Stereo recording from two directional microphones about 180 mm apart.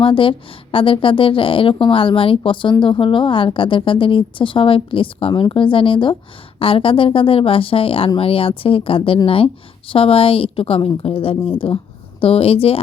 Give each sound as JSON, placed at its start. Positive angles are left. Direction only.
{"t": 0.0, "sound": "a woman's voice", "side_deg": 30}